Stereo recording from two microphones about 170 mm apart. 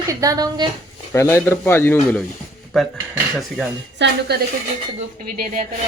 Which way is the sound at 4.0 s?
90° right.